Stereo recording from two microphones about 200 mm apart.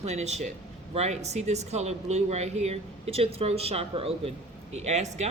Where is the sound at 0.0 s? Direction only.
35° right (ahead or behind).